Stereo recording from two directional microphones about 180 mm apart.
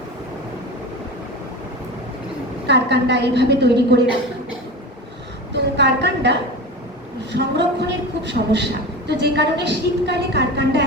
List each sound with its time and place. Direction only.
2.6 s a woman's voice: 70° right (ahead or behind)
5.5 s a sound: 70° right (ahead or behind)
7.3 s a woman's voice: 70° right (ahead or behind)